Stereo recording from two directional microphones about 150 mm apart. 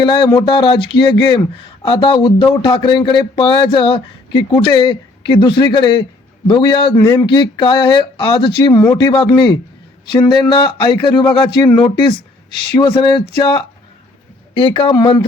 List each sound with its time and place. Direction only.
0.3 s speech: 35° left (ahead or behind)
7.0 s speech: 20° left (ahead or behind)
7.3 s speech: 30° left (ahead or behind)